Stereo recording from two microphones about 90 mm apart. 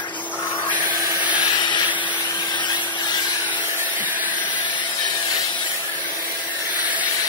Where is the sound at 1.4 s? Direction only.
60° left (ahead or behind).